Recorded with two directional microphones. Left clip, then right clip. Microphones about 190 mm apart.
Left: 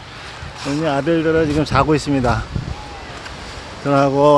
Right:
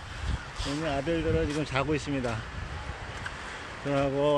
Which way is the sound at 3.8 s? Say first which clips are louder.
Left 13 dB; 35° left (ahead or behind).